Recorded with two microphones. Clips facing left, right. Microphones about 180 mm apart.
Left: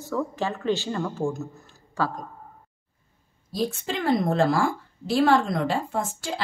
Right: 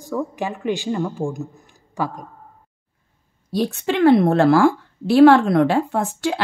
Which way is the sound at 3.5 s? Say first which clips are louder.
Right 6 dB; 65° right (ahead or behind).